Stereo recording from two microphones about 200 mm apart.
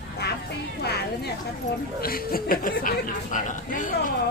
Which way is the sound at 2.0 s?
45° left (ahead or behind).